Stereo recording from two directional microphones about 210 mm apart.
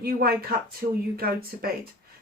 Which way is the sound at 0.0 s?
45° right (ahead or behind).